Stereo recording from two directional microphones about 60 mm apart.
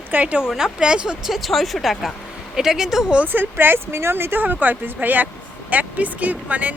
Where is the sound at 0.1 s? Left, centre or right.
Right.